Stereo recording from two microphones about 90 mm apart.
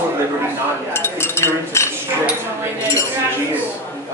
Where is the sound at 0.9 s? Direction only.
25° left (ahead or behind).